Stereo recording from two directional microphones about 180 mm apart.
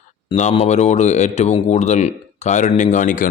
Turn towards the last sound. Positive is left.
turn(degrees=50)  # may be behind; listen again after turning